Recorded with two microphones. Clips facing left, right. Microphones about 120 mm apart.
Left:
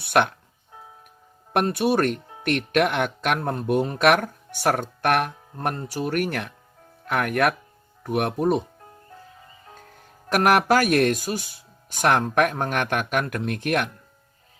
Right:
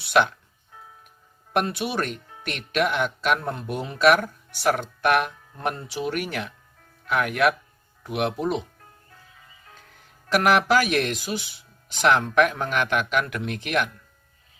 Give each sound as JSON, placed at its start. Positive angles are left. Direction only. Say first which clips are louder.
{"t": 0.0, "sound": "music", "louder": "even", "side_deg": 55}
{"t": 1.5, "sound": "speech", "louder": "left 4 dB", "side_deg": 50}
{"t": 9.7, "sound": "speech", "louder": "left 5 dB", "side_deg": 45}